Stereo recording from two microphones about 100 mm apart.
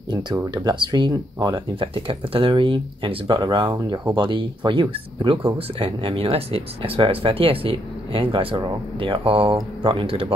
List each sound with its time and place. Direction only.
0.7 s speech: 45° right (ahead or behind)
5.6 s speech: 70° right (ahead or behind)